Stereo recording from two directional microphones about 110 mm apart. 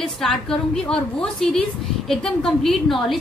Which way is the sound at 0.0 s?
5° left (ahead or behind).